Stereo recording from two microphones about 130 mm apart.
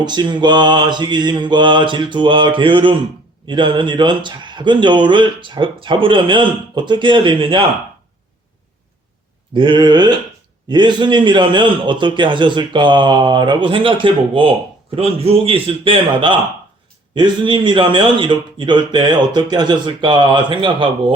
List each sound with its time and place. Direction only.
0.0 s a man's voice: 35° right (ahead or behind)
9.5 s a man's voice: 40° right (ahead or behind)